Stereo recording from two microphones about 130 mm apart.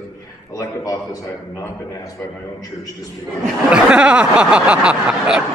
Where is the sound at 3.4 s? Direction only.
5° right (ahead or behind).